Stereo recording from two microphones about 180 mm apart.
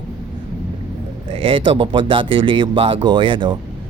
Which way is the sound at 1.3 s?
30° right (ahead or behind).